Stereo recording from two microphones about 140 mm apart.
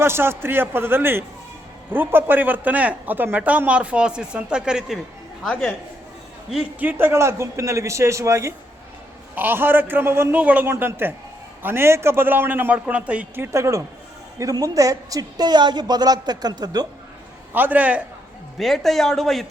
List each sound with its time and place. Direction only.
0.0 s a man's voice: 15° right (ahead or behind); by 5.7 s 5° left (ahead or behind)
6.5 s a woman's voice: 10° right (ahead or behind); by 16.8 s 30° right (ahead or behind)
17.5 s a man's voice: 10° right (ahead or behind)
18.5 s a man's voice: centre (ahead or behind)